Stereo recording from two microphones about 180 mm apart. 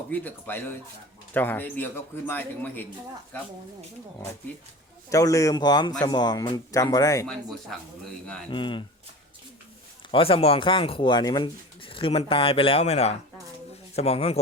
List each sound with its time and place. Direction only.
0.1 s speech: 10° left (ahead or behind)
5.0 s speech: 20° left (ahead or behind)
7.7 s speech: centre (ahead or behind)
8.4 s speech: 25° left (ahead or behind)
10.1 s speech: 30° left (ahead or behind)